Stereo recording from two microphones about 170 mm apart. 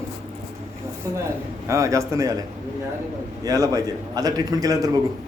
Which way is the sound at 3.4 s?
20° right (ahead or behind).